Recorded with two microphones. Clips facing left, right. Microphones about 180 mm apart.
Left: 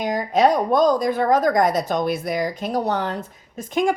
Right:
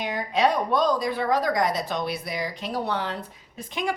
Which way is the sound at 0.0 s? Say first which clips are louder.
Left 5 dB; 45° left (ahead or behind).